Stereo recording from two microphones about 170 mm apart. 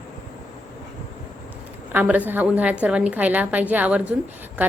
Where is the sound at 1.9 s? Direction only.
10° right (ahead or behind).